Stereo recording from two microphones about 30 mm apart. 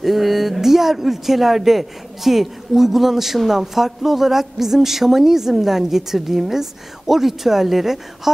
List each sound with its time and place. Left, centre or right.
0.0 s a woman's voice: centre